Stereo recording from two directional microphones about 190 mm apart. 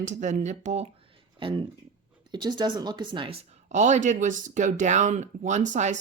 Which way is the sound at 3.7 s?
40° right (ahead or behind).